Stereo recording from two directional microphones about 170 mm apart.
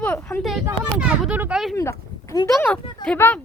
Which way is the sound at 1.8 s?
20° left (ahead or behind).